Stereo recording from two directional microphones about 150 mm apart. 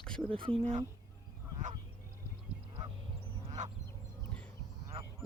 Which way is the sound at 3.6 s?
55° right (ahead or behind).